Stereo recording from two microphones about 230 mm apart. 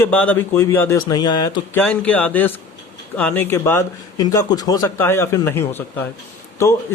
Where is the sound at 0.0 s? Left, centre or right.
Centre.